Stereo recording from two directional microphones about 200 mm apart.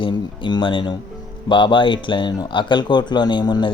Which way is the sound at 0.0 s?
25° left (ahead or behind).